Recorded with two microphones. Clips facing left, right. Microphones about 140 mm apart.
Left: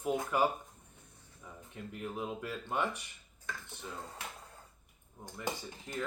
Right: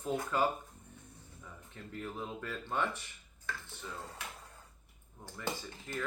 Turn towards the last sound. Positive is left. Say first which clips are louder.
# left 1 dB
turn(degrees=15)  # may be behind; listen again after turning